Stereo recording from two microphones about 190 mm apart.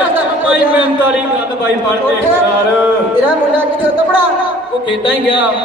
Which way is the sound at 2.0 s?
10° right (ahead or behind).